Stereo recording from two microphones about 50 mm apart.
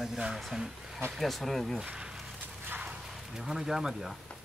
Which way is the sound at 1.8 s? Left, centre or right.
Centre.